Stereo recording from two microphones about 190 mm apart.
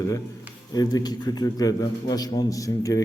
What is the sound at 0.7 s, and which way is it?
A man's voice, 20° left (ahead or behind).